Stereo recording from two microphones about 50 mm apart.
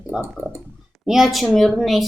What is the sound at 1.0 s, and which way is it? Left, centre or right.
Speech, centre.